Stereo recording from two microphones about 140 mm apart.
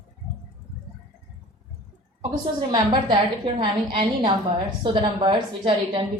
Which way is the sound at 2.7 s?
30° right (ahead or behind).